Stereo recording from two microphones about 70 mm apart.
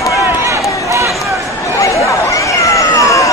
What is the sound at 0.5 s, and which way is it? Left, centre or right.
Run, right.